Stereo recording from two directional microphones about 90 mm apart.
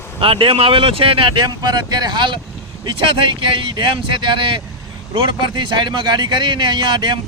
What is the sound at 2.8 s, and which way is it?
A man's voice, 70° right (ahead or behind).